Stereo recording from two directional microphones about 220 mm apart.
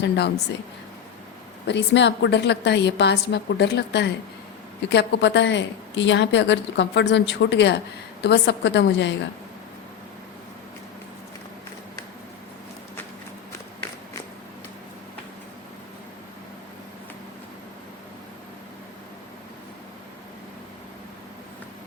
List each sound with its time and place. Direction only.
0.0 s a woman's voice: 50° left (ahead or behind)
1.6 s a woman's voice: 55° left (ahead or behind)